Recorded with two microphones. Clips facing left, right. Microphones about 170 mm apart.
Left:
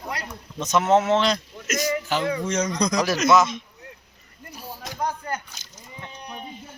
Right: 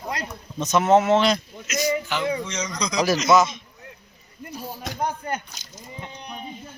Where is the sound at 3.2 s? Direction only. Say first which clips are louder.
Even; centre (ahead or behind).